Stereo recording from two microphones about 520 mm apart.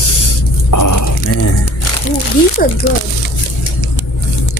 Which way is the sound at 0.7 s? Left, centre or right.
Left.